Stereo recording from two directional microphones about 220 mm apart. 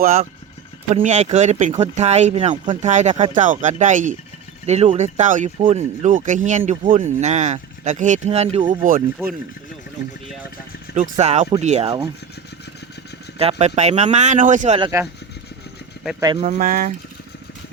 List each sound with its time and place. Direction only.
0.0 s speech: 40° right (ahead or behind)
8.8 s speech: 35° right (ahead or behind)
10.9 s speech: 30° right (ahead or behind)
13.4 s speech: 30° right (ahead or behind)
14.8 s speech: 15° right (ahead or behind)
16.2 s speech: 20° right (ahead or behind)
16.5 s speech: 40° right (ahead or behind)